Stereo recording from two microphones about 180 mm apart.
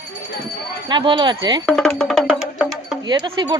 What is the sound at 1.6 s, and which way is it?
Music, 5° left (ahead or behind).